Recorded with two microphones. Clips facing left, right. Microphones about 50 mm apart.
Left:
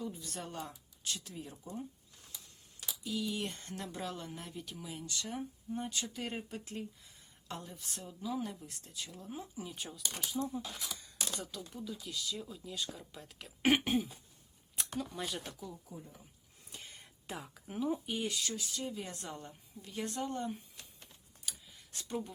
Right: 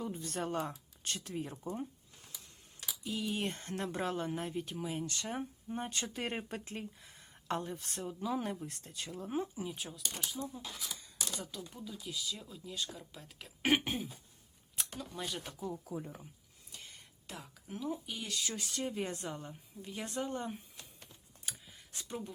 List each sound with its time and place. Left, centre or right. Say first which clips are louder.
0.0 s speech: right 4 dB; right
3.0 s a woman's voice: right 1 dB; right
9.7 s speech: even; centre
15.9 s speech: right 8 dB; right
17.2 s speech: left 3 dB; centre
18.5 s speech: right 2 dB; right
19.2 s a woman's voice: right 3 dB; centre
21.9 s speech: left 3 dB; centre